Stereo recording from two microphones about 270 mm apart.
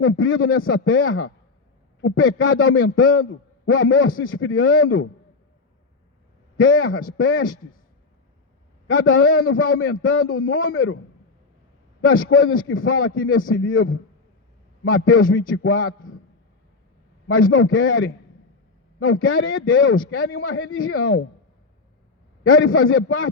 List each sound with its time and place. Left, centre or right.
0.0 s a man's voice: left
6.6 s a man's voice: left
8.9 s a man's voice: left
12.0 s a man's voice: left
17.2 s a man's voice: left
22.4 s a man's voice: left